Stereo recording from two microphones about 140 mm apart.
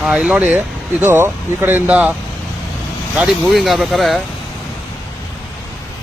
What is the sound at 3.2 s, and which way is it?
Speech, centre (ahead or behind).